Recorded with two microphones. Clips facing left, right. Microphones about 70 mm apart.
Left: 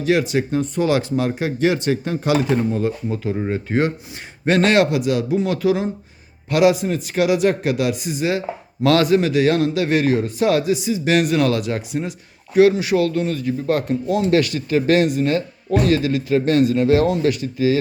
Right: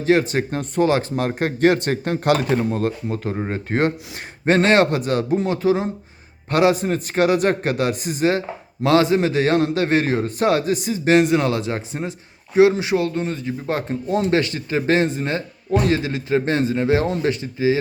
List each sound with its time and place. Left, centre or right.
0.0 s a man's voice: right
5.5 s a man's voice: right
8.8 s a man's voice: right